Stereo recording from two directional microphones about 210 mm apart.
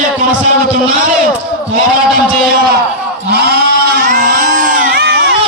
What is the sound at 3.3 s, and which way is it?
Sheep, 50° right (ahead or behind).